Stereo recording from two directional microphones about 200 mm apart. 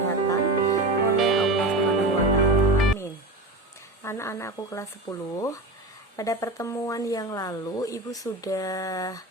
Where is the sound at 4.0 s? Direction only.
15° left (ahead or behind).